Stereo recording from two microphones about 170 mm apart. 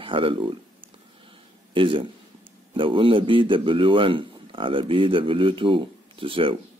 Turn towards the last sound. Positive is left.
turn(degrees=-30)  # may be behind; listen again after turning